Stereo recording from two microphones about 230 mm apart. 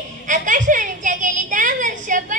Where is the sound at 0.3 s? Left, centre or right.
Right.